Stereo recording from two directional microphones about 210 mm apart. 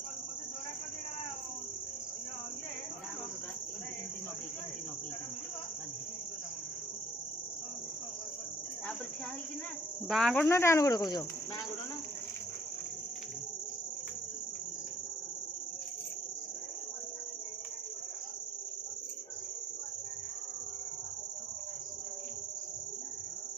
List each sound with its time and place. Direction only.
10.1 s speech: centre (ahead or behind)
10.5 s speech: 15° left (ahead or behind)